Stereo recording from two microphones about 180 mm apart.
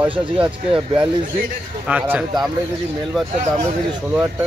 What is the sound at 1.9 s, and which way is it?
Speech, 5° right (ahead or behind).